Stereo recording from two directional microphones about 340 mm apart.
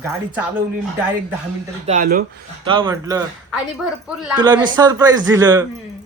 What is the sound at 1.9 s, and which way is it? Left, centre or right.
Speech, right.